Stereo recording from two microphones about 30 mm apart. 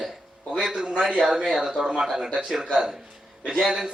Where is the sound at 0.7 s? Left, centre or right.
Right.